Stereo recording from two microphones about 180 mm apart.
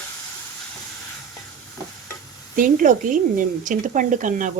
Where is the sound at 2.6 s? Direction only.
50° right (ahead or behind).